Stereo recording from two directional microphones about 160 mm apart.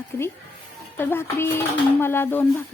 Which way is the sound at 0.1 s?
15° left (ahead or behind).